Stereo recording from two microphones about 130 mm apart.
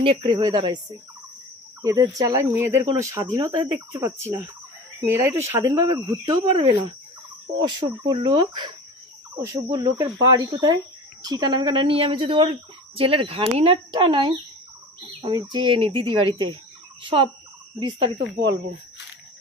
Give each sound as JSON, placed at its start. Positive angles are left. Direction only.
{"t": 0.0, "sound": "speech", "side_deg": -40}
{"t": 7.6, "sound": "speech", "side_deg": -35}
{"t": 9.3, "sound": "speech", "side_deg": -25}